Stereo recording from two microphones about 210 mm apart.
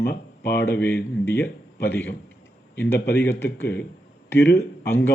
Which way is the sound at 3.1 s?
10° left (ahead or behind).